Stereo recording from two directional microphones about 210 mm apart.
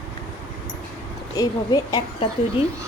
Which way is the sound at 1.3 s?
20° left (ahead or behind).